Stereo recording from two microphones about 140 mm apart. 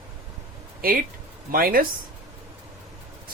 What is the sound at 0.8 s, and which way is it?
Speech, 90° right.